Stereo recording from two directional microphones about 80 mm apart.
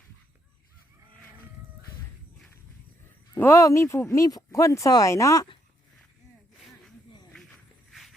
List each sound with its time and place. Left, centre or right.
3.3 s speech: left
4.3 s speech: left
7.9 s a sound: centre